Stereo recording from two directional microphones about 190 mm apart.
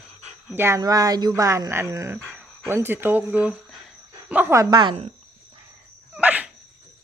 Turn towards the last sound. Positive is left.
turn(degrees=-5)  # may be behind; listen again after turning